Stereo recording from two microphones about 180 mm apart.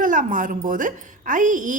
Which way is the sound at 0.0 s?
45° right (ahead or behind).